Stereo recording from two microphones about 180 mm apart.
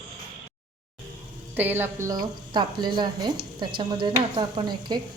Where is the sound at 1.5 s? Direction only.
10° right (ahead or behind).